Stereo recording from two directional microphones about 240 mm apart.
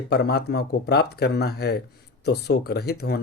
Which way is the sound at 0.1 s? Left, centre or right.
Left.